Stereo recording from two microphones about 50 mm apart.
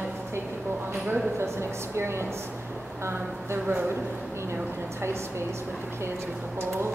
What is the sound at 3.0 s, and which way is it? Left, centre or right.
Speech, right.